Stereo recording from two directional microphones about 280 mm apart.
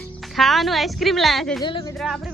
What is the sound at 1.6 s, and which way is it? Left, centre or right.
Speech, centre.